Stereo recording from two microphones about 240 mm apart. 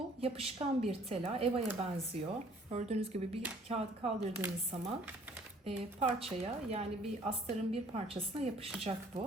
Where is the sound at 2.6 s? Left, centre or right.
Right.